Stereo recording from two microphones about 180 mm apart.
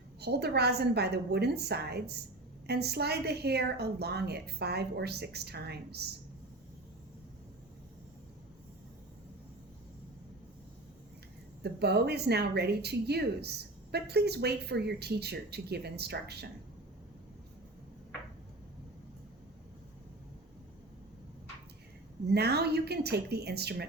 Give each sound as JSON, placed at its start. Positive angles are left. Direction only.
{"t": 0.2, "sound": "speech", "side_deg": -65}
{"t": 11.6, "sound": "speech", "side_deg": -65}
{"t": 22.3, "sound": "speech", "side_deg": -65}